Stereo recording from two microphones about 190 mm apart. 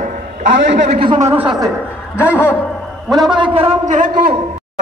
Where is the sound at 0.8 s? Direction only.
30° right (ahead or behind).